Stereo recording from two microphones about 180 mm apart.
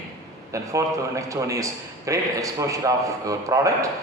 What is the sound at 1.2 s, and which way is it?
A man's voice, 15° right (ahead or behind).